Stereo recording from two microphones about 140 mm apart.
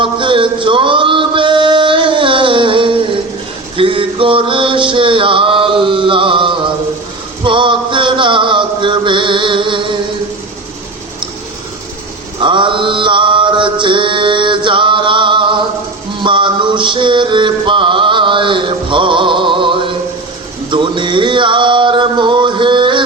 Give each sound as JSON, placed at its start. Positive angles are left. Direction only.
{"t": 0.0, "sound": "male singing", "side_deg": -35}
{"t": 3.8, "sound": "a sound", "side_deg": -40}
{"t": 7.4, "sound": "chant", "side_deg": -35}
{"t": 12.4, "sound": "mantra", "side_deg": -35}
{"t": 20.7, "sound": "male singing", "side_deg": -35}